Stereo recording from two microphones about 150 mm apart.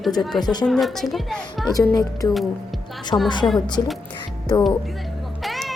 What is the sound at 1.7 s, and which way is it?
A woman's voice, 25° left (ahead or behind).